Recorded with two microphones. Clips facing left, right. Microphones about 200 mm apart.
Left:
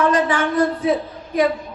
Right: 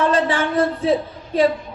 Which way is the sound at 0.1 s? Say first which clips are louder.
Even; 30° right (ahead or behind).